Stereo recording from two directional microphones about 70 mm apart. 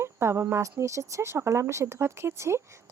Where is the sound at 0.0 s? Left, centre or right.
Right.